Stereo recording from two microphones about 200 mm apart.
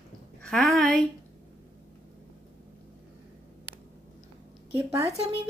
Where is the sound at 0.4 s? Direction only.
Centre (ahead or behind).